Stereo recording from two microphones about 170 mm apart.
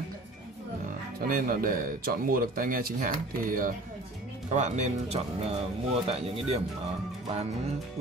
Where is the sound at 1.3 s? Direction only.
55° right (ahead or behind).